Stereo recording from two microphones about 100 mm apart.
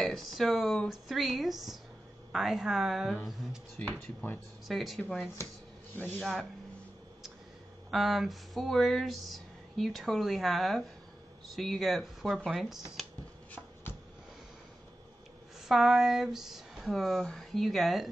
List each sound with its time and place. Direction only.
0.0 s speech: centre (ahead or behind)
3.7 s speech: 20° left (ahead or behind)
4.6 s speech: centre (ahead or behind)
5.9 s speech: 20° left (ahead or behind)
7.9 s speech: centre (ahead or behind)
15.7 s speech: 5° right (ahead or behind)